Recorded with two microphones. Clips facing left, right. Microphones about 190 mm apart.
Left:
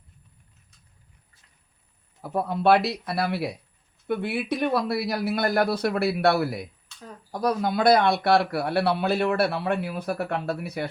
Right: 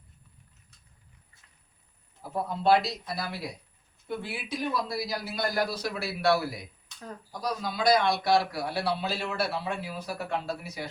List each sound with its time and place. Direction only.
2.2 s a man's voice: 65° left (ahead or behind)